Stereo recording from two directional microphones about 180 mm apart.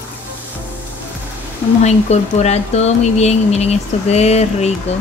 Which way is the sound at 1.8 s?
40° left (ahead or behind).